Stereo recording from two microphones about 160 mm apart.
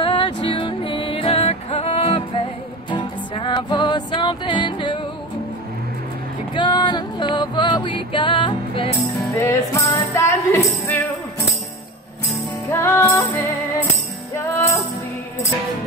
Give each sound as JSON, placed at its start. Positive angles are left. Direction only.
{"t": 0.0, "sound": "music", "side_deg": 30}
{"t": 6.5, "sound": "music", "side_deg": 30}
{"t": 9.4, "sound": "music", "side_deg": 20}
{"t": 12.7, "sound": "music", "side_deg": 15}
{"t": 14.3, "sound": "music", "side_deg": 15}